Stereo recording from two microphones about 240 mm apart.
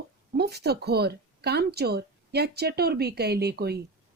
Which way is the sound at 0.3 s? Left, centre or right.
Right.